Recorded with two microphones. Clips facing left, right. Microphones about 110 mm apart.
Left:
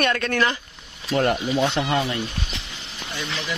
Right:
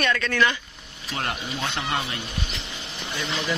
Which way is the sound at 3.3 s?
10° right (ahead or behind).